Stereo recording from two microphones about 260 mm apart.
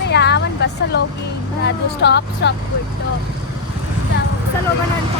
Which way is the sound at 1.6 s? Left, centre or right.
Left.